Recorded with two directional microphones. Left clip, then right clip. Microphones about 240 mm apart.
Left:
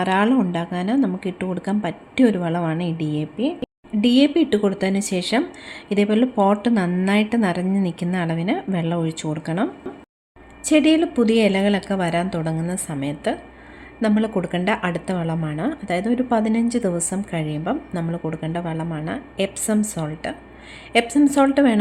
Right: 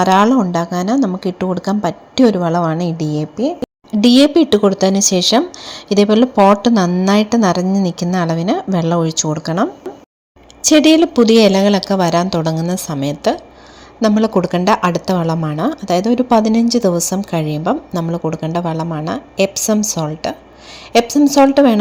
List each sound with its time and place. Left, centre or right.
0.0 s speech: centre
10.7 s speech: right